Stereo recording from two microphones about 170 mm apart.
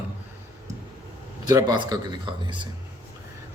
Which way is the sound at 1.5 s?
25° right (ahead or behind).